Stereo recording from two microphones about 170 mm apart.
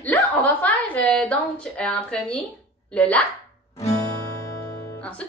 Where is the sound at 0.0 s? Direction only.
10° left (ahead or behind).